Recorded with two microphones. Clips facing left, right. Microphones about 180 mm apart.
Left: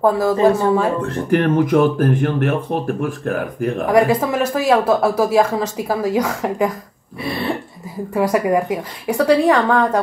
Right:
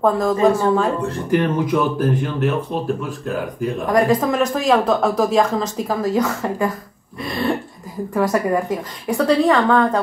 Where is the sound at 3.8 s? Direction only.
10° left (ahead or behind).